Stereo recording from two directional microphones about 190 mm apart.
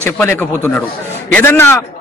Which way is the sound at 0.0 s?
10° left (ahead or behind).